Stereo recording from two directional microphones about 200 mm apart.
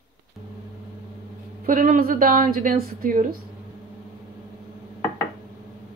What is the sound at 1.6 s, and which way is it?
A woman's voice, 45° right (ahead or behind).